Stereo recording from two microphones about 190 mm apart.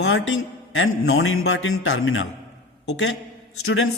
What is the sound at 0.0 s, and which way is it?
A man's voice, 90° left.